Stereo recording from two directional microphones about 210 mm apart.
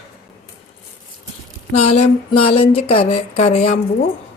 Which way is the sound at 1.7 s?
30° left (ahead or behind).